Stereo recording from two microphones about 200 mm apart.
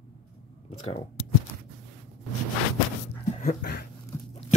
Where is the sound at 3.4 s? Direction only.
45° left (ahead or behind).